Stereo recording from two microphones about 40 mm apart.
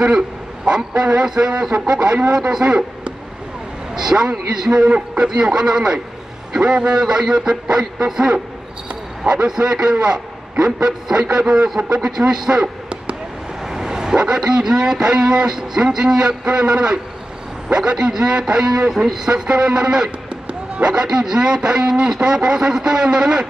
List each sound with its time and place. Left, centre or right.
0.7 s a man's voice: centre
2.6 s speech: right
3.9 s a man's voice: centre
13.7 s a man's voice: centre
19.4 s a man's voice: right